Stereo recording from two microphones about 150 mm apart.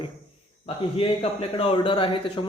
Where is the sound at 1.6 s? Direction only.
35° left (ahead or behind).